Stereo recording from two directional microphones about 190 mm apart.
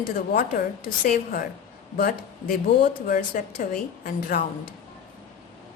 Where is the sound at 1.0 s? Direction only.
50° left (ahead or behind).